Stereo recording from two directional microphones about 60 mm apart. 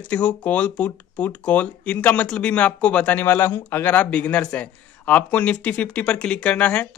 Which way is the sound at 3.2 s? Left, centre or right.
Left.